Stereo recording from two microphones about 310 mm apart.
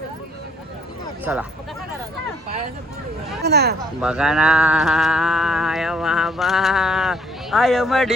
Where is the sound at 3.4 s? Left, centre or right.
Right.